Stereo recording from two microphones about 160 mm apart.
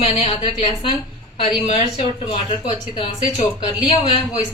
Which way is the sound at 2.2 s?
40° left (ahead or behind).